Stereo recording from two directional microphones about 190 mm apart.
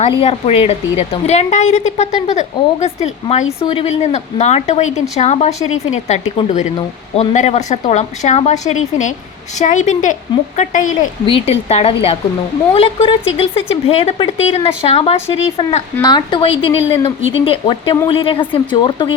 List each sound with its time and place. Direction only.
0.0 s a woman's voice: 35° left (ahead or behind)
11.3 s a woman's voice: 30° left (ahead or behind)